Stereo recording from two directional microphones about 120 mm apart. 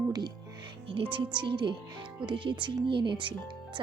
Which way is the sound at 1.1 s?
40° right (ahead or behind).